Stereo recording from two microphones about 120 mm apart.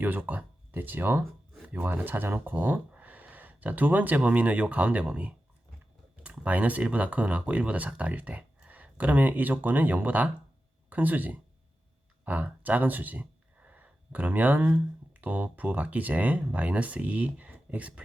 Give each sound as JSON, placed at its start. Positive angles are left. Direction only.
{"t": 0.0, "sound": "speech", "side_deg": -15}